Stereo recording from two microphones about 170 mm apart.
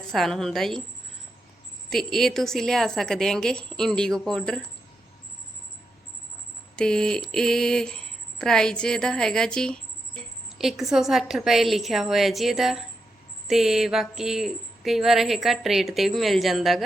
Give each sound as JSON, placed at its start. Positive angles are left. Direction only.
{"t": 0.0, "sound": "speech", "side_deg": 0}
{"t": 1.9, "sound": "speech", "side_deg": 0}
{"t": 6.7, "sound": "speech", "side_deg": 5}